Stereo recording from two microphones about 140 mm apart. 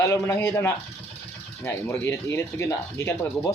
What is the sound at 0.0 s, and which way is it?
Speech, 20° left (ahead or behind).